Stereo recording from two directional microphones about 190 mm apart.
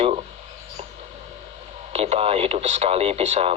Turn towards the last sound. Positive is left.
turn(degrees=-35)  # may be behind; listen again after turning